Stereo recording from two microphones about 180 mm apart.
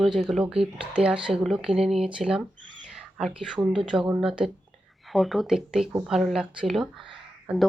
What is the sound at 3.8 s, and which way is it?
Speech, 5° right (ahead or behind).